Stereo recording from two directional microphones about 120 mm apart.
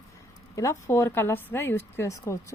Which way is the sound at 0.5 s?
25° left (ahead or behind).